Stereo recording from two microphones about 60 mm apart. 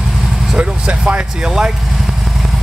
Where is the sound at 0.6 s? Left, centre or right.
Centre.